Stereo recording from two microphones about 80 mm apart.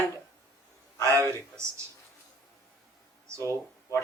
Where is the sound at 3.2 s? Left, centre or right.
Right.